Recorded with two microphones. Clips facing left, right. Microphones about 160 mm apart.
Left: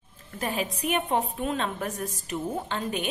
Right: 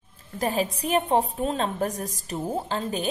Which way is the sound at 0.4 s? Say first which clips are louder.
Right 4 dB; 35° right (ahead or behind).